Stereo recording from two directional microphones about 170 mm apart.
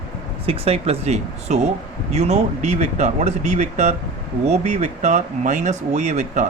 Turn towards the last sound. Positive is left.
turn(degrees=-45)  # may be behind; listen again after turning